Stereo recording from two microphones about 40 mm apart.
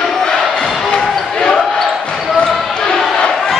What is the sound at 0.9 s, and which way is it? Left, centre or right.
Basketball bounce, left.